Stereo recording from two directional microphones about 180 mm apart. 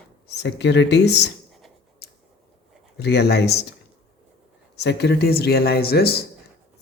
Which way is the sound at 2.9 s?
65° left (ahead or behind).